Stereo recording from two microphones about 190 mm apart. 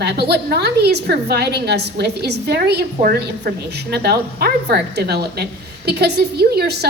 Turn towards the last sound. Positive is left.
turn(degrees=-55)  # may be behind; listen again after turning